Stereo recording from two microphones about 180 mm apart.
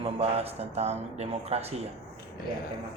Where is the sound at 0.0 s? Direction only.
35° right (ahead or behind).